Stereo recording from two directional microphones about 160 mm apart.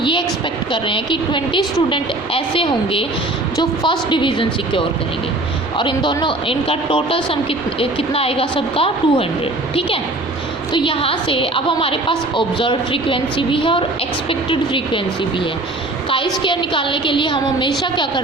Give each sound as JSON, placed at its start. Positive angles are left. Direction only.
{"t": 0.0, "sound": "a sound", "side_deg": 30}
{"t": 0.7, "sound": "a woman's voice", "side_deg": 30}
{"t": 10.7, "sound": "a woman's voice", "side_deg": 30}
{"t": 16.0, "sound": "a woman's voice", "side_deg": 35}